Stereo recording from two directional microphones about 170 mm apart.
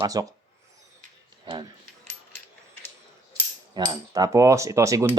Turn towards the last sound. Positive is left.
turn(degrees=-15)  # may be behind; listen again after turning